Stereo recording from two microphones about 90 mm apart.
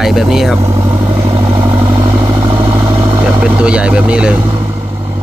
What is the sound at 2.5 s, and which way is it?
Vehicle, 25° right (ahead or behind).